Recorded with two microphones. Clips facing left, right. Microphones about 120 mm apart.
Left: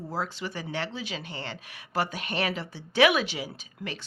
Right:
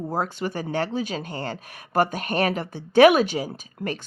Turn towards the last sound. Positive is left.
turn(degrees=-45)  # may be behind; listen again after turning